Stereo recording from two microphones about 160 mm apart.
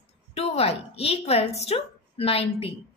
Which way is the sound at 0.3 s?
40° left (ahead or behind).